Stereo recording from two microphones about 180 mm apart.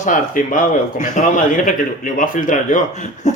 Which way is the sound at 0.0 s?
45° left (ahead or behind).